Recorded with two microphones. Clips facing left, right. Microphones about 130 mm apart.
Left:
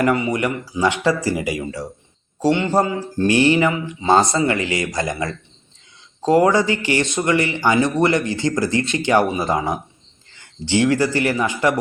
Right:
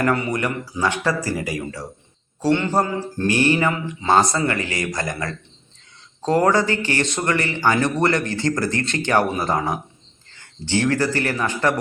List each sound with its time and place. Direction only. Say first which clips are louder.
0.0 s speech: left 2 dB; 15° left (ahead or behind)